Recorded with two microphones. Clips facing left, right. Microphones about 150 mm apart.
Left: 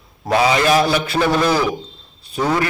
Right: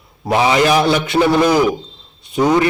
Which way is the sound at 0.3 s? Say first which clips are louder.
Right 2 dB; 20° right (ahead or behind).